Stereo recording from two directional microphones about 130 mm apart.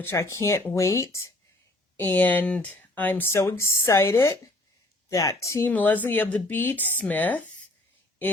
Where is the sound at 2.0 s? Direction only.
15° left (ahead or behind).